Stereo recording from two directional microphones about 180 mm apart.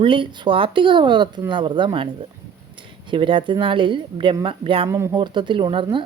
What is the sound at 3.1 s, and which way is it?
A woman's voice, 30° right (ahead or behind).